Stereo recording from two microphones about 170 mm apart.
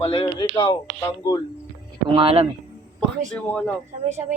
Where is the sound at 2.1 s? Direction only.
30° right (ahead or behind).